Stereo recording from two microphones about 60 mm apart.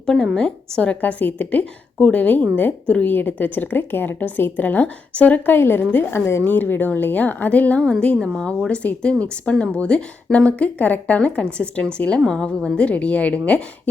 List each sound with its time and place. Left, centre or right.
0.0 s a woman's voice: centre; by 1.6 s left
2.0 s speech: centre
5.5 s speech: left
6.4 s speech: left
7.8 s a woman's voice: centre